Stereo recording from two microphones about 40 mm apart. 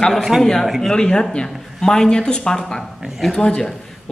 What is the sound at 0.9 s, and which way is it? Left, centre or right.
A man's voice, left.